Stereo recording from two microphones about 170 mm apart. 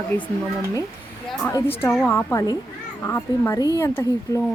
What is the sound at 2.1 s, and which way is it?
A woman's voice, 15° left (ahead or behind).